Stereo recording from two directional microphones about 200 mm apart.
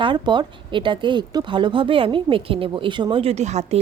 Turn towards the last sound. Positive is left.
turn(degrees=-35)  # may be behind; listen again after turning